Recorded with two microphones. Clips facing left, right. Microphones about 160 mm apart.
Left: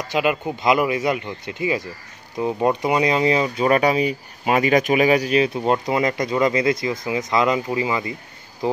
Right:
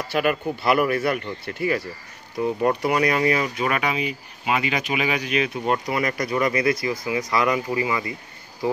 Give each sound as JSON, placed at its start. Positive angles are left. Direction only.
{"t": 0.1, "sound": "speech", "side_deg": 20}